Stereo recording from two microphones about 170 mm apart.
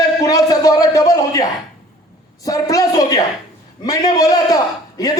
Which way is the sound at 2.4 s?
20° left (ahead or behind).